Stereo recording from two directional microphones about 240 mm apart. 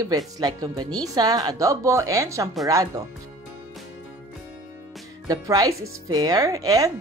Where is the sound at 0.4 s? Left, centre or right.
Centre.